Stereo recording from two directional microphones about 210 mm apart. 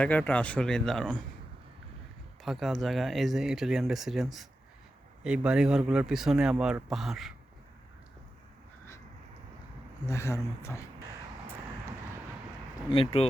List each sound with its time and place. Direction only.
0.0 s speech: 5° left (ahead or behind)
2.4 s speech: centre (ahead or behind)
10.1 s speech: 15° left (ahead or behind)
12.9 s speech: 25° left (ahead or behind)